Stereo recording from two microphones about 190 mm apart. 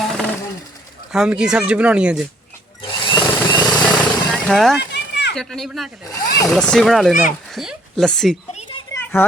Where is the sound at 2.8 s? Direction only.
25° left (ahead or behind).